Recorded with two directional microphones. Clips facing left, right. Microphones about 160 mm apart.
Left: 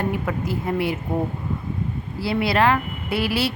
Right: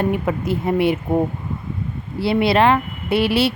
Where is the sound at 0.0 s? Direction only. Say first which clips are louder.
Right 4 dB; 25° right (ahead or behind).